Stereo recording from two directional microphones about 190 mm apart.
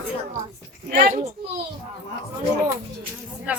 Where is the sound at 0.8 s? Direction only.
45° right (ahead or behind).